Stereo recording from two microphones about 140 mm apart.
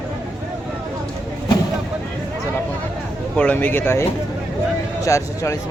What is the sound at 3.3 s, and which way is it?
Speech, 10° left (ahead or behind).